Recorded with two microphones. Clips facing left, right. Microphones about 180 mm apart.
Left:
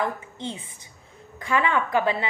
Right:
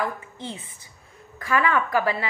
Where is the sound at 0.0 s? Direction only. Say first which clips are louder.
Left 1 dB; 20° left (ahead or behind).